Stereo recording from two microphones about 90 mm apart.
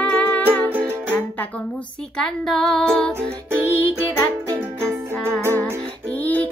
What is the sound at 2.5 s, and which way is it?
Female singing, 5° left (ahead or behind).